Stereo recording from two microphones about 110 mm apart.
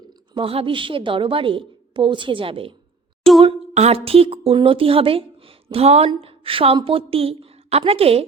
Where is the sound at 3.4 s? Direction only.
70° right (ahead or behind).